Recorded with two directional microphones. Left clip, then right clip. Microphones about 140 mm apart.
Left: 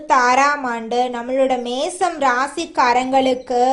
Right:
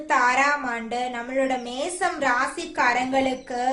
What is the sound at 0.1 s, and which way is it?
A woman's voice, 45° left (ahead or behind).